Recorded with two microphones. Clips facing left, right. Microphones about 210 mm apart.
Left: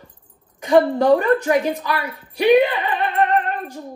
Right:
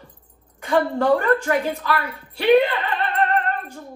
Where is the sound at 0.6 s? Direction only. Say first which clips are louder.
Left 5 dB; 20° left (ahead or behind).